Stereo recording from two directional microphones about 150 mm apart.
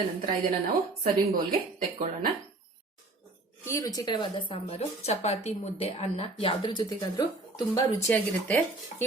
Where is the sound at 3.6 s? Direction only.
20° left (ahead or behind).